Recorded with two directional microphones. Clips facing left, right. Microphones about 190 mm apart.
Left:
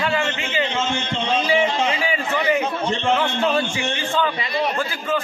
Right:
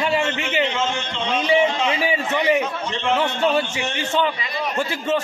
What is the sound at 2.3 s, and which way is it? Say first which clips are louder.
Speech: right 1 dB; 25° right (ahead or behind).